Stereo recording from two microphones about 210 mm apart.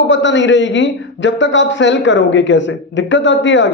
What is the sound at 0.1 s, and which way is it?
A man's voice, 60° left (ahead or behind).